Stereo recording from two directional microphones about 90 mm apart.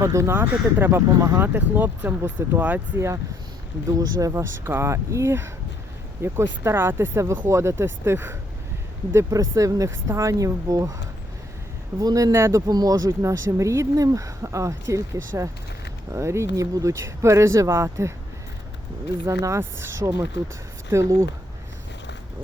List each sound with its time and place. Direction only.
0.0 s speech: 35° right (ahead or behind); by 2.8 s 20° right (ahead or behind)
3.8 s speech: 40° right (ahead or behind)
9.3 s speech: 40° right (ahead or behind)
11.9 s speech: 40° right (ahead or behind)
19.2 s speech: 30° right (ahead or behind)